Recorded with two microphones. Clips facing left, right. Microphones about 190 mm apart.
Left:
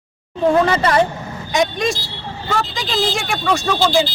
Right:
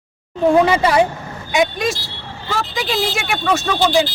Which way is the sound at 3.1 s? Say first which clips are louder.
Even; 5° right (ahead or behind).